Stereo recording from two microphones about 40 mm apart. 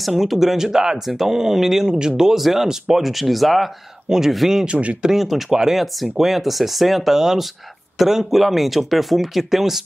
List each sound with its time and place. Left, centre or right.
0.0 s speech: centre
2.3 s speech: centre
4.6 s speech: right
5.0 s speech: centre